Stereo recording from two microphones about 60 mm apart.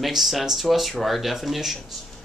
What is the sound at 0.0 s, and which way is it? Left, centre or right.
Speech, centre.